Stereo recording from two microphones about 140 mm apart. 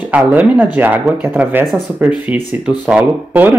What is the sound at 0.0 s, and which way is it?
A man's voice, 10° right (ahead or behind).